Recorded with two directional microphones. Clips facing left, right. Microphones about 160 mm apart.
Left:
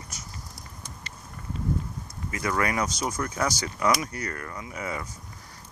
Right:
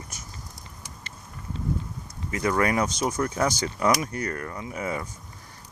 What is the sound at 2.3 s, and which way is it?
Speech, 35° right (ahead or behind).